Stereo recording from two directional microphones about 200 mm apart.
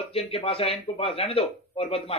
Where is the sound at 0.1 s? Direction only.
30° left (ahead or behind).